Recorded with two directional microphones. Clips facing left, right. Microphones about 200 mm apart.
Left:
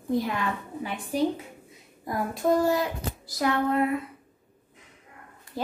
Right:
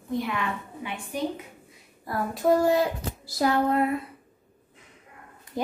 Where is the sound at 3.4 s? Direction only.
30° right (ahead or behind).